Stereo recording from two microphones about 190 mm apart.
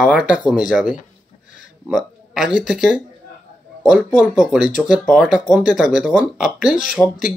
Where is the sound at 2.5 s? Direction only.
5° right (ahead or behind).